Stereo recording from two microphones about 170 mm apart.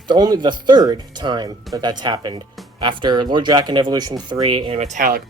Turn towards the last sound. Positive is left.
turn(degrees=-55)  # may be behind; listen again after turning